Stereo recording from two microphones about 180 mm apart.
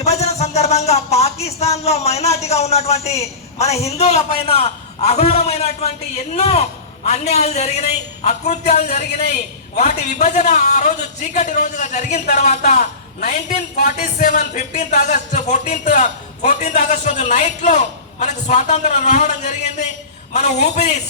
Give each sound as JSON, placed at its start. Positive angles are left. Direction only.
{"t": 0.0, "sound": "a man's voice", "side_deg": 35}